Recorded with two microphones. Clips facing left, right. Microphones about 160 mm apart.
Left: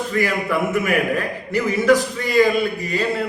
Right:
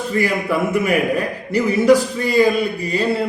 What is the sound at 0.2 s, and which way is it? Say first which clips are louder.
A man's voice: right 2 dB; 15° right (ahead or behind).